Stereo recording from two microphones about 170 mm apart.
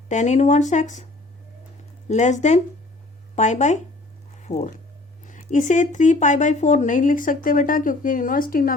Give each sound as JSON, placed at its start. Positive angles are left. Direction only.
{"t": 0.1, "sound": "speech", "side_deg": 45}
{"t": 2.0, "sound": "speech", "side_deg": 45}
{"t": 4.4, "sound": "a sound", "side_deg": 45}
{"t": 5.2, "sound": "speech", "side_deg": 45}